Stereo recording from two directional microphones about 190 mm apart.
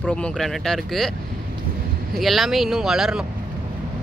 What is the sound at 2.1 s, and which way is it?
Speech, centre (ahead or behind).